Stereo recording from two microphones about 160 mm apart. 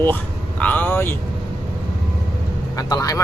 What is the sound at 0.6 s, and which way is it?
Vehicle, 10° left (ahead or behind).